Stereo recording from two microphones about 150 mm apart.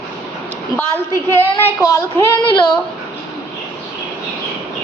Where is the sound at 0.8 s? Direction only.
15° left (ahead or behind).